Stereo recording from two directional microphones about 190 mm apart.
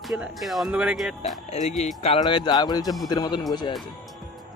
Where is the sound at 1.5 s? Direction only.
35° left (ahead or behind).